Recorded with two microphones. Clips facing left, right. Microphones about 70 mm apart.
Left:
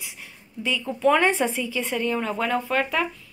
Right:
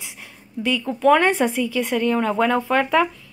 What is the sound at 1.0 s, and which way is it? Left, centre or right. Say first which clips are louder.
Speech: right 4 dB; right.